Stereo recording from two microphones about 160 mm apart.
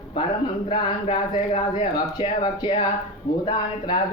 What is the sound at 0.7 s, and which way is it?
Speech, 40° left (ahead or behind).